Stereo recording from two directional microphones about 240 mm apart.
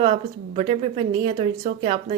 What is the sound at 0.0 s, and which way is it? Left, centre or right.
A woman's voice, right.